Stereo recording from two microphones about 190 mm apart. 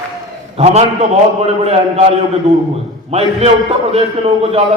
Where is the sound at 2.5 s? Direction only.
35° right (ahead or behind).